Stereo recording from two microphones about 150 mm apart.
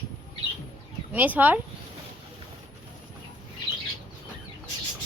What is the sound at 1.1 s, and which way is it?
Speech, 10° right (ahead or behind).